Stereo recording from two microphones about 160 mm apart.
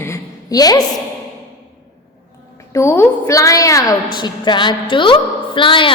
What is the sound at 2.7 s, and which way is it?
A woman's voice, 15° left (ahead or behind).